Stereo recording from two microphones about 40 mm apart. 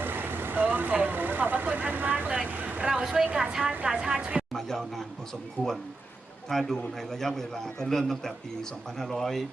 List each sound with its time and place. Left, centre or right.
0.0 s vehicle: right
2.3 s speech: right
2.9 s a woman's voice: centre
4.5 s a man's voice: centre
6.5 s a man's voice: centre